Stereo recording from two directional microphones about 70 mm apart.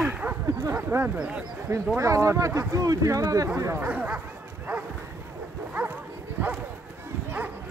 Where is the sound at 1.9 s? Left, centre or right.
Right.